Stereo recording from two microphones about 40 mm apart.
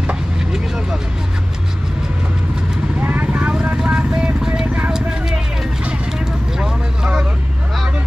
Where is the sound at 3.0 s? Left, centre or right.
Right.